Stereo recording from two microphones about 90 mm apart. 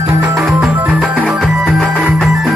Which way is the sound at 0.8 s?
15° right (ahead or behind).